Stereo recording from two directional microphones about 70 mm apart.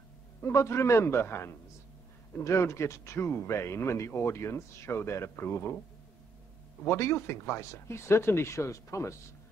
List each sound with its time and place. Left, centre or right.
0.4 s speech: left
6.8 s speech: left